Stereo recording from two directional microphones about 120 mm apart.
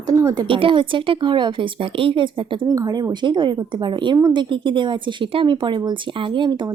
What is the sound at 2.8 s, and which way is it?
Speech, 30° right (ahead or behind).